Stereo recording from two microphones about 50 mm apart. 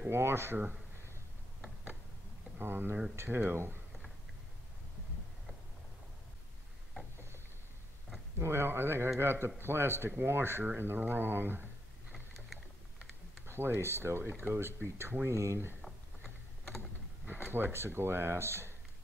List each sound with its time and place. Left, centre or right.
0.1 s speech: right
2.6 s speech: right
8.4 s speech: right
12.1 s a sound: centre
13.5 s speech: right
15.2 s speech: right
17.5 s speech: right